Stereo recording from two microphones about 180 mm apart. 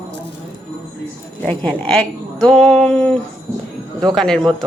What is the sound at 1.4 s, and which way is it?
A woman's voice, 5° left (ahead or behind).